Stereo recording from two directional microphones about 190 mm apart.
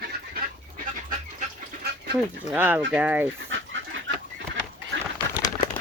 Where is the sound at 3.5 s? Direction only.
85° right.